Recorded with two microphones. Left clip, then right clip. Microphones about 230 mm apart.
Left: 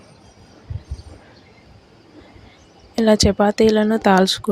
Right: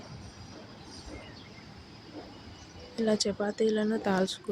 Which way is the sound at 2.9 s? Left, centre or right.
Left.